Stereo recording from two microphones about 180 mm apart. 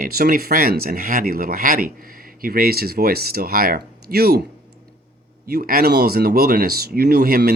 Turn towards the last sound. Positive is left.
turn(degrees=-55)  # may be behind; listen again after turning